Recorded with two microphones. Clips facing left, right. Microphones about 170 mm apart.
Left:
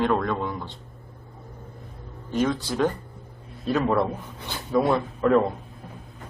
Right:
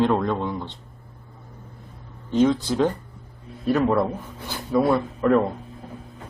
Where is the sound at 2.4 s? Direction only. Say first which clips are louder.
Right 3 dB; 10° right (ahead or behind).